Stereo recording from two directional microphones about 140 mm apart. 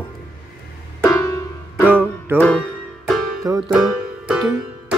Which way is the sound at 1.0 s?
20° left (ahead or behind).